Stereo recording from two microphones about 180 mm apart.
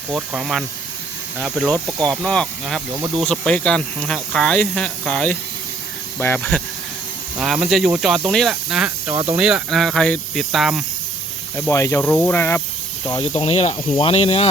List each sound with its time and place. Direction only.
0.2 s speech: 5° right (ahead or behind)
7.3 s speech: 5° right (ahead or behind)
11.5 s speech: 10° left (ahead or behind)
13.1 s speech: 30° left (ahead or behind)